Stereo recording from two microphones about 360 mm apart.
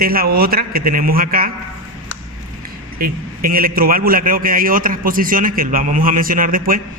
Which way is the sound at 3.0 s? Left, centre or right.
Right.